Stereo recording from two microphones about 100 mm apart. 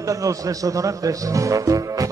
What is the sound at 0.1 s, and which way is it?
Speech, 35° right (ahead or behind).